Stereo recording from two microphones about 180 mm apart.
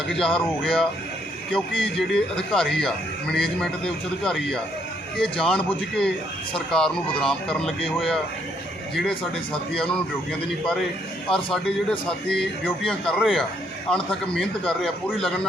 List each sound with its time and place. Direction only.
0.1 s a man's voice: 5° left (ahead or behind)
5.1 s a man's voice: 5° left (ahead or behind)
11.5 s a man's voice: 5° left (ahead or behind)